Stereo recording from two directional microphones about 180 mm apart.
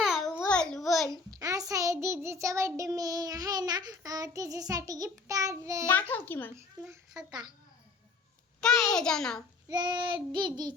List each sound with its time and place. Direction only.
0.0 s babbling: centre (ahead or behind)
1.3 s child singing: 20° right (ahead or behind)
5.8 s a child's voice: 10° left (ahead or behind)
7.3 s child singing: 25° right (ahead or behind)
8.6 s a child's voice: 5° left (ahead or behind)
9.6 s child singing: 25° right (ahead or behind)